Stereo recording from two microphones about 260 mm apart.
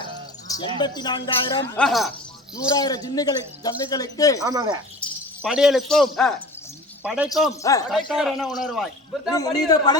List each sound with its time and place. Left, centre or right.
0.0 s a sound: centre
0.8 s speech: centre
1.7 s a man's voice: centre
2.6 s speech: centre
4.4 s speech: centre
4.9 s speech: centre
7.6 s speech: centre
7.9 s a man's voice: centre
9.3 s speech: centre